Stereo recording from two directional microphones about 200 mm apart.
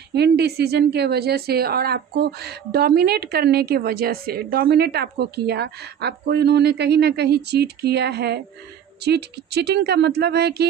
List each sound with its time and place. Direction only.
0.1 s speech: 55° right (ahead or behind)